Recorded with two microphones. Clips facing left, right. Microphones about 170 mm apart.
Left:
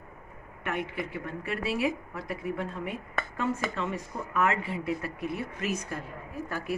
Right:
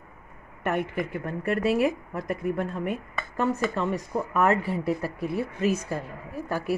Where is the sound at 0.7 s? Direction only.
45° right (ahead or behind); by 5.9 s 30° right (ahead or behind).